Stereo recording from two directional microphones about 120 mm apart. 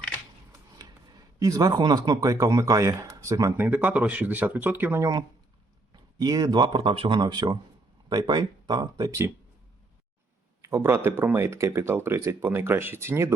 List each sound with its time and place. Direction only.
1.4 s speech: 30° right (ahead or behind)
3.7 s speech: 10° right (ahead or behind); by 7.2 s 50° right (ahead or behind)
7.2 s speech: 35° right (ahead or behind)
10.6 s speech: 25° right (ahead or behind)